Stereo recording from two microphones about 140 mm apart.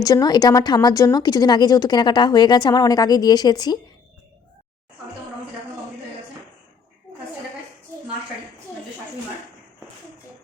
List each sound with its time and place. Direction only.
0.0 s a woman's voice: 30° left (ahead or behind)